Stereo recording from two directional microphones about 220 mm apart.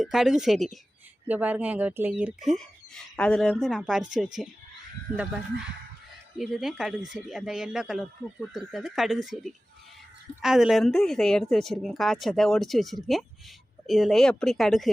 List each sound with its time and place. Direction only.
0.0 s speech: centre (ahead or behind)
5.1 s speech: 40° right (ahead or behind)
6.3 s speech: centre (ahead or behind)